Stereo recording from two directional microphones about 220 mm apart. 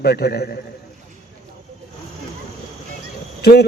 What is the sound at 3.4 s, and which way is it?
Speech, 50° left (ahead or behind).